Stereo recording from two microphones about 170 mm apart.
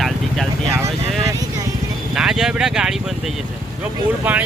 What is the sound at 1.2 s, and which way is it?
Vehicle, 20° right (ahead or behind).